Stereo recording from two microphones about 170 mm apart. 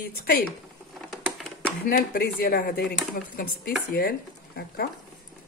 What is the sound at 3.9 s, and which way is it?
Speech, 60° left (ahead or behind).